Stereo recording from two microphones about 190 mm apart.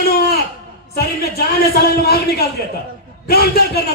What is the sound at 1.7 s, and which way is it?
Speech, 55° left (ahead or behind).